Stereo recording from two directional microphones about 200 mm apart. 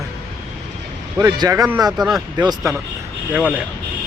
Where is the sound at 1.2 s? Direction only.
15° right (ahead or behind).